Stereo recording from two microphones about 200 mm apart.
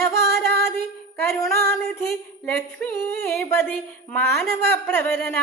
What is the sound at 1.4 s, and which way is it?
A woman's voice, 15° left (ahead or behind).